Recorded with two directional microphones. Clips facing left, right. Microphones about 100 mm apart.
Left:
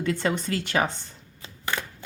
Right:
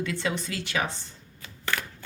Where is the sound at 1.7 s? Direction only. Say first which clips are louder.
Left 1 dB; 15° left (ahead or behind).